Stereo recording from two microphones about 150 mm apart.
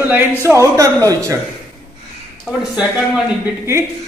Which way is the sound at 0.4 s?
20° right (ahead or behind).